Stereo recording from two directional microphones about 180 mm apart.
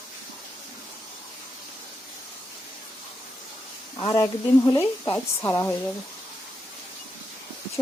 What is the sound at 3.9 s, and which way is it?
A woman's voice, 20° left (ahead or behind).